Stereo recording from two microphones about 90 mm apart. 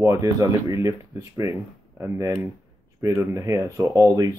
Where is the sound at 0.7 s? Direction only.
35° right (ahead or behind).